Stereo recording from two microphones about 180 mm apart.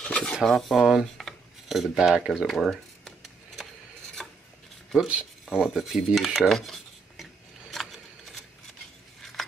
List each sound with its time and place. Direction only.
0.0 s dishes: 5° left (ahead or behind)
4.2 s filing: centre (ahead or behind)
4.9 s cutlery: 5° right (ahead or behind)
7.7 s a sound: centre (ahead or behind)